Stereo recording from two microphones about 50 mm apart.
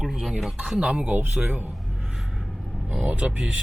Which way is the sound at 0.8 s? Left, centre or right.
Right.